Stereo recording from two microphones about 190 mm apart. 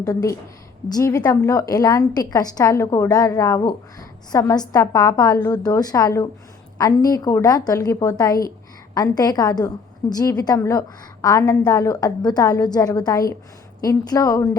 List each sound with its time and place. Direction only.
0.0 s a woman's voice: 20° left (ahead or behind)